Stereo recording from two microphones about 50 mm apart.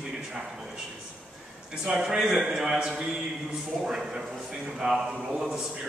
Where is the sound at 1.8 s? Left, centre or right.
Centre.